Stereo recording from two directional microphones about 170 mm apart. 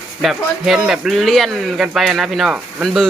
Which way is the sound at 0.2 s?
Centre (ahead or behind).